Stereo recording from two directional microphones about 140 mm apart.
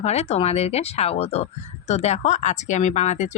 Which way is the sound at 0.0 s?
50° left (ahead or behind).